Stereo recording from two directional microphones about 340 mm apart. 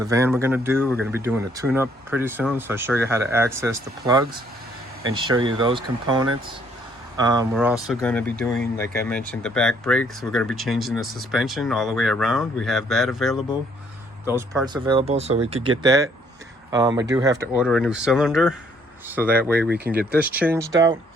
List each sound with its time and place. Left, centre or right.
0.0 s speech: centre